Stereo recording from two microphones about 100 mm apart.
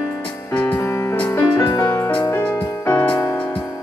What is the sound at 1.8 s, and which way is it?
Music, 30° left (ahead or behind).